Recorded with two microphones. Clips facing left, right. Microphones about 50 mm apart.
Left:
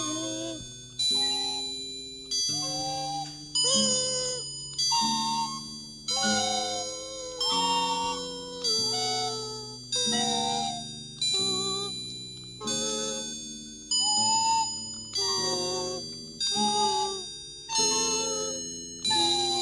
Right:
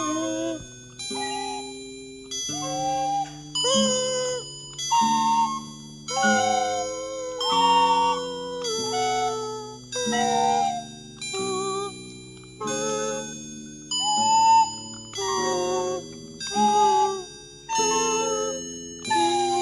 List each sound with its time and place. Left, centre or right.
0.0 s music: right